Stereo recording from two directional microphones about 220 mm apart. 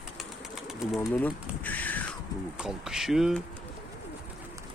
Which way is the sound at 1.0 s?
10° left (ahead or behind).